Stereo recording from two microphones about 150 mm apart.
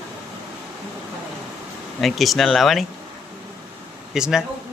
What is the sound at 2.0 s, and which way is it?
Speech, centre (ahead or behind).